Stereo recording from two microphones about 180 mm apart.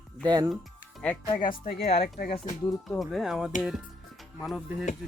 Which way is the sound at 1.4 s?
50° left (ahead or behind).